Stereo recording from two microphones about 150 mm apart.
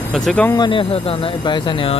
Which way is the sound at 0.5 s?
30° left (ahead or behind).